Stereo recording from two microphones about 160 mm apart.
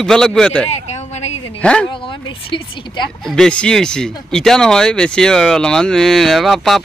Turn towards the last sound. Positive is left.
turn(degrees=0)  # may be behind; listen again after turning